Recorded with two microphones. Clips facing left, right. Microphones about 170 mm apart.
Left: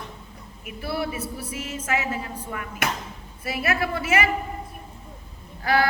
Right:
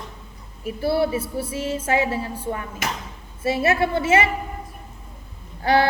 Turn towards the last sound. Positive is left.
turn(degrees=-30)  # may be behind; listen again after turning